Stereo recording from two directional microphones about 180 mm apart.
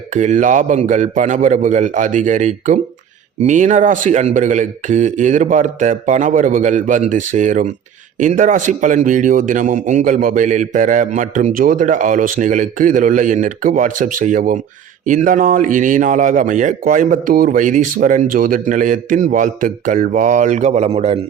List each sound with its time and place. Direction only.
0.1 s a man's voice: 45° right (ahead or behind)